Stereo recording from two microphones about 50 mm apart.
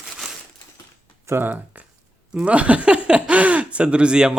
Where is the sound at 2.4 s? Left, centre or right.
Right.